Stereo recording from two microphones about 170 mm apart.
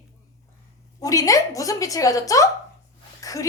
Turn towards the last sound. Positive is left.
turn(degrees=20)  # may be behind; listen again after turning